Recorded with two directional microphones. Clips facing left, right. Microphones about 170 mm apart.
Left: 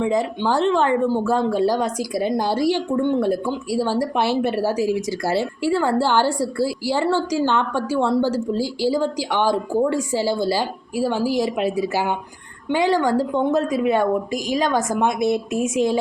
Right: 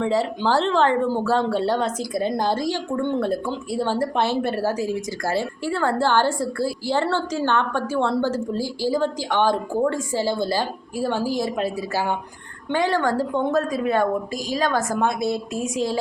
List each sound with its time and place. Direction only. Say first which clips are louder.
0.0 s a woman's voice: left 1 dB; 10° left (ahead or behind)